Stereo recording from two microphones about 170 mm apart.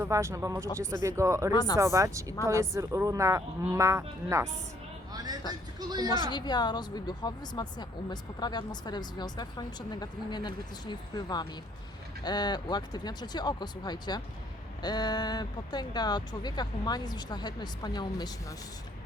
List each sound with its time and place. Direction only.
0.0 s speech: 15° right (ahead or behind)
1.5 s speech: 20° left (ahead or behind)
1.8 s speech: 15° right (ahead or behind)
6.1 s speech: 25° left (ahead or behind)